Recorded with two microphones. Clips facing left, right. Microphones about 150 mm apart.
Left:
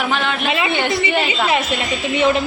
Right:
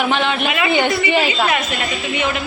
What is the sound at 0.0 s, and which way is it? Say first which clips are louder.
Speech: right 2 dB; centre (ahead or behind).